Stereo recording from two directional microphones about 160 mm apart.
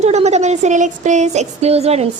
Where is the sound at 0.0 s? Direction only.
45° right (ahead or behind).